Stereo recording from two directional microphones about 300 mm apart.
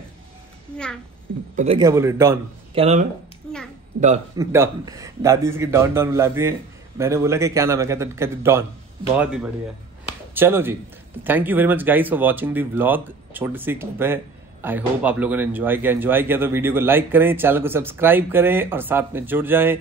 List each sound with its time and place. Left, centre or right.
1.6 s speech: centre
2.8 s speech: right
4.4 s speech: centre